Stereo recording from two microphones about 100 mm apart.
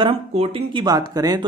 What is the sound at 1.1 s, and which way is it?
Speech, 40° right (ahead or behind).